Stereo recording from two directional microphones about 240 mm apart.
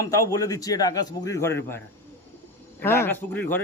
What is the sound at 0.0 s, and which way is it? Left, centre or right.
A man's voice, centre.